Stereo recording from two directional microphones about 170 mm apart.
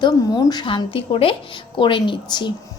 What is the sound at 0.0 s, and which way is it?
A woman's voice, 25° left (ahead or behind).